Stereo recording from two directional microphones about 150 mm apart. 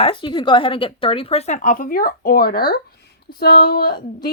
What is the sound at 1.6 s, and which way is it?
Speech, 65° left (ahead or behind).